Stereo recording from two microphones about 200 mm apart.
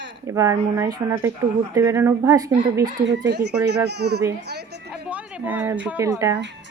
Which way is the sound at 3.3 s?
55° right (ahead or behind).